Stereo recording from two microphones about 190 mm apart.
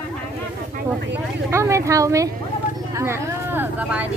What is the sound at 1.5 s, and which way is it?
A woman's voice, 15° right (ahead or behind).